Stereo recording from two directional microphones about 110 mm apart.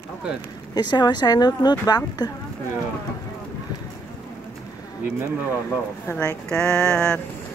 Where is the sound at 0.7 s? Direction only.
40° left (ahead or behind).